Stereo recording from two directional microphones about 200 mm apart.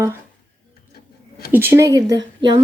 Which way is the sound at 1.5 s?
10° right (ahead or behind).